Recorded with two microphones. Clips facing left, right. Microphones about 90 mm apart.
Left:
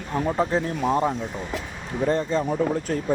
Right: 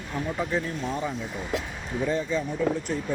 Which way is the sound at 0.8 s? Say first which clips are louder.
Left 8 dB; 55° left (ahead or behind).